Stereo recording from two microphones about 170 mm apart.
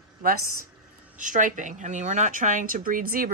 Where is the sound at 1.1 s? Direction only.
50° right (ahead or behind).